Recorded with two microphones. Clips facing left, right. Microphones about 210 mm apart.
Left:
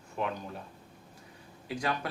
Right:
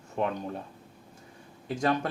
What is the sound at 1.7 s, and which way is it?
Speech, 45° right (ahead or behind).